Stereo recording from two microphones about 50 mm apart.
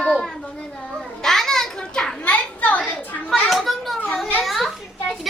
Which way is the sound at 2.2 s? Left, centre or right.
Left.